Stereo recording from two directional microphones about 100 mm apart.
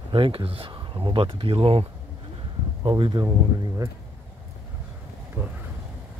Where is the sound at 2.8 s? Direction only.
55° right (ahead or behind).